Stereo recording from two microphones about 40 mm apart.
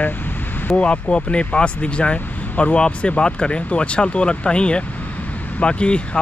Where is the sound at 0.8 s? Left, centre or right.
Left.